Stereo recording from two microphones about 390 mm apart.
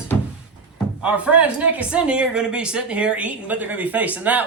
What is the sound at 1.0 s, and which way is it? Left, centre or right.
Speech, centre.